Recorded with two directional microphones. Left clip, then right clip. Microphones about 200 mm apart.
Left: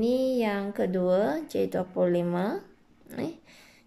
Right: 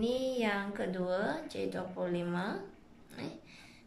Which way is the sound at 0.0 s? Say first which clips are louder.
Left 7 dB; 25° left (ahead or behind).